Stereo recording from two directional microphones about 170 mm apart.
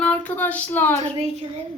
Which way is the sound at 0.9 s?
40° right (ahead or behind).